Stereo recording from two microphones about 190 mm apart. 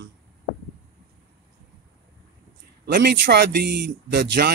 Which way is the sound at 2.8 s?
60° right (ahead or behind).